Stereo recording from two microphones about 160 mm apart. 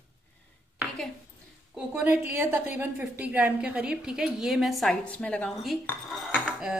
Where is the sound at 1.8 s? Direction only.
5° right (ahead or behind).